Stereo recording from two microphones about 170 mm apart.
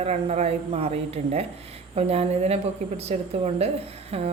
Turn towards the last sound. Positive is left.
turn(degrees=-35)  # may be behind; listen again after turning